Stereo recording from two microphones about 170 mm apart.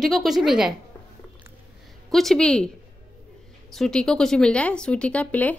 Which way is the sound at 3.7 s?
5° left (ahead or behind).